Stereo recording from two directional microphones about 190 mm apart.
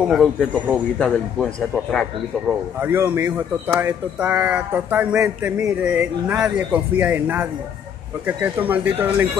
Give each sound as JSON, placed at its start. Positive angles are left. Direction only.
{"t": 0.1, "sound": "speech", "side_deg": 0}
{"t": 2.8, "sound": "speech", "side_deg": -10}